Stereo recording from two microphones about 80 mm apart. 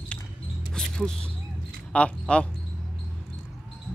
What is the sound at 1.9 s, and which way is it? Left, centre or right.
Speech, centre.